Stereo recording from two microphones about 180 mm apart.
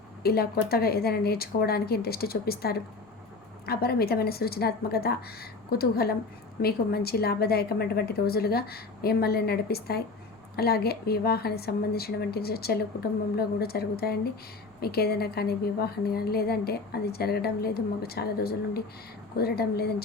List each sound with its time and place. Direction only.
0.2 s a woman's voice: 60° left (ahead or behind)